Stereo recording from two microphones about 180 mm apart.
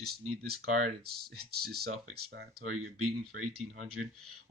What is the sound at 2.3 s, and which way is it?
Speech, 65° right (ahead or behind).